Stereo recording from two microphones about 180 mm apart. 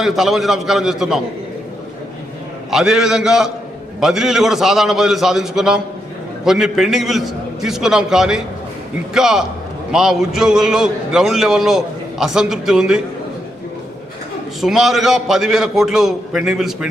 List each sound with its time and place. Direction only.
0.0 s a man's voice: centre (ahead or behind)
2.6 s a man's voice: centre (ahead or behind)
14.6 s a man's voice: centre (ahead or behind)